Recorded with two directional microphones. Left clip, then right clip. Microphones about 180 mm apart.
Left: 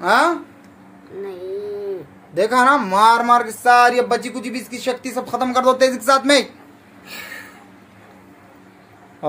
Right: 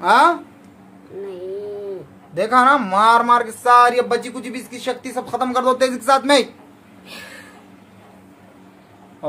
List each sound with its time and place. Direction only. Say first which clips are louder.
0.0 s speech: right 2 dB; 10° left (ahead or behind)
2.3 s speech: even; 20° left (ahead or behind)